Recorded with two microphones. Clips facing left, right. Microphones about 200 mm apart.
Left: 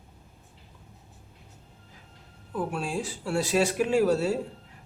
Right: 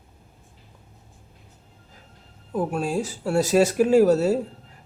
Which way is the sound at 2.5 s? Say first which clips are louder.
Right 6 dB; 40° right (ahead or behind).